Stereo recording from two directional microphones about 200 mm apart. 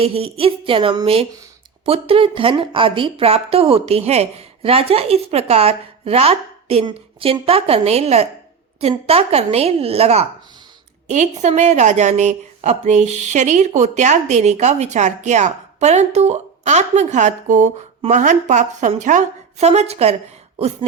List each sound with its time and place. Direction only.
0.0 s a woman's voice: 30° right (ahead or behind)